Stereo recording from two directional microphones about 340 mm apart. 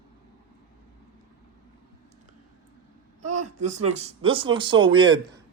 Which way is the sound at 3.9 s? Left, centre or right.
Centre.